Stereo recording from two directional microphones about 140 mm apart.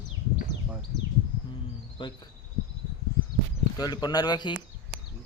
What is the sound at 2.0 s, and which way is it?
Speech, 35° left (ahead or behind).